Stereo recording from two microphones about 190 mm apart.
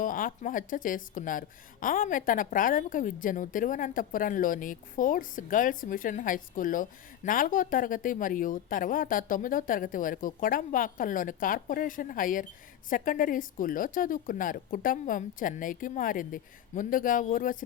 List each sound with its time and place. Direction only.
0.0 s a woman's voice: 45° left (ahead or behind)